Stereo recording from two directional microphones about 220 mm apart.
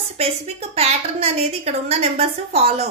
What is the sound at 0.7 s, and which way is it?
A woman's voice, 30° right (ahead or behind).